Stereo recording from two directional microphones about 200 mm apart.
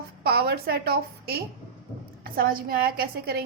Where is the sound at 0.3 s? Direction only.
50° right (ahead or behind).